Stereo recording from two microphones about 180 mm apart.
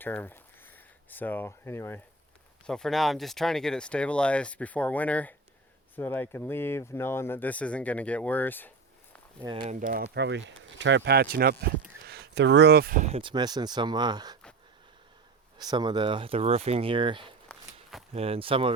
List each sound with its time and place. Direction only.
0.0 s a sound: 10° left (ahead or behind)
1.1 s speech: 10° left (ahead or behind)
2.6 s speech: 5° left (ahead or behind)
9.6 s speech: 45° right (ahead or behind)
9.9 s speech: 70° right (ahead or behind); by 13.3 s 35° right (ahead or behind)
13.3 s speech: 25° right (ahead or behind)
15.5 s speech: 25° right (ahead or behind)